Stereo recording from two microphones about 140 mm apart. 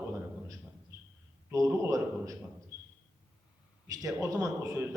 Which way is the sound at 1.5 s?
20° right (ahead or behind).